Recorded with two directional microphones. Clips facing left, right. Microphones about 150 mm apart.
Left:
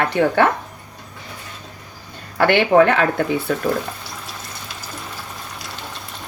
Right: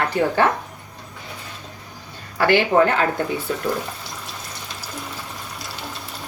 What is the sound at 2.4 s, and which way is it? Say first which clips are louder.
Speech: left 3 dB; 60° left (ahead or behind).